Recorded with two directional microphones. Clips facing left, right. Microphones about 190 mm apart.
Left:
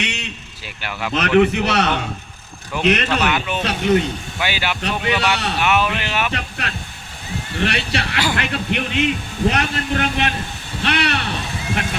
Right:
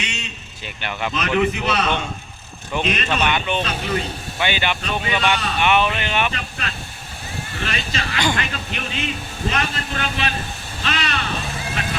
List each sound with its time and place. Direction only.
0.0 s a sound: 65° left (ahead or behind)
0.8 s speech: 5° left (ahead or behind)
1.1 s a man's voice: 65° left (ahead or behind)
3.2 s speech: 5° left (ahead or behind)
3.6 s a man's voice: 70° left (ahead or behind)
4.4 s speech: 5° left (ahead or behind)
4.8 s a man's voice: 75° left (ahead or behind)
5.5 s speech: 5° left (ahead or behind)
6.3 s a man's voice: 70° left (ahead or behind)